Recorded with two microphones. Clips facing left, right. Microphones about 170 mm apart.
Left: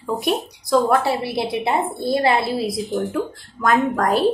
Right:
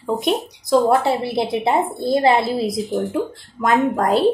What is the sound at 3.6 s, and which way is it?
Speech, 25° right (ahead or behind).